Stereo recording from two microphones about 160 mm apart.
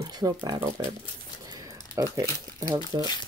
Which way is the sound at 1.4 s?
25° right (ahead or behind).